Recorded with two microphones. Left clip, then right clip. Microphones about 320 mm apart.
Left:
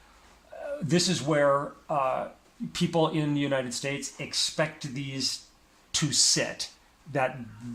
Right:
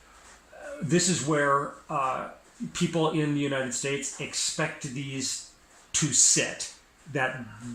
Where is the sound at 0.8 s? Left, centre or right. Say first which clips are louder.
Right 1 dB; centre.